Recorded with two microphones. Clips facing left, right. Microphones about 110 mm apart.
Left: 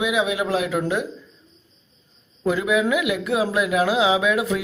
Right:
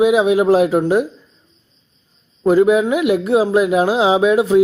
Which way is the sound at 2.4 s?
40° right (ahead or behind).